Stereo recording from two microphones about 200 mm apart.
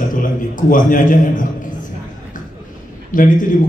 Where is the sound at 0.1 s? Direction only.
40° left (ahead or behind).